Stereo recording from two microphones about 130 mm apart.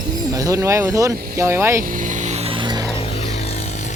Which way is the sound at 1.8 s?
90° right.